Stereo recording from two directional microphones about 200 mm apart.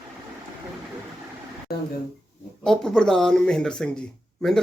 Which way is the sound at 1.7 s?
50° left (ahead or behind).